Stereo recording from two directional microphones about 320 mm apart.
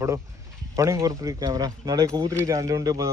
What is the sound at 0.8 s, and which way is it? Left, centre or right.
Speech, centre.